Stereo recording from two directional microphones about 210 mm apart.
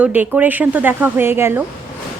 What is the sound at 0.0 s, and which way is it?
A woman's voice, 5° right (ahead or behind).